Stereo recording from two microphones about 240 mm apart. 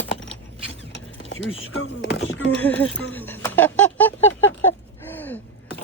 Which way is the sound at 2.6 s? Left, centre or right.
Centre.